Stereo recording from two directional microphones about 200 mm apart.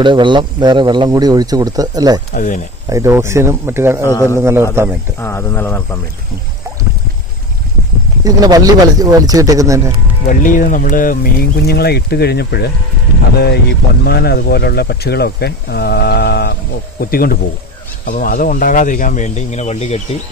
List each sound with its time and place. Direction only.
0.0 s speech: 25° right (ahead or behind)
2.3 s speech: 40° left (ahead or behind)
2.9 s speech: 15° right (ahead or behind)
4.0 s speech: 15° left (ahead or behind)
4.4 s speech: 10° right (ahead or behind)
5.2 s speech: 10° left (ahead or behind)
8.2 s speech: 20° right (ahead or behind)
10.2 s speech: 40° left (ahead or behind)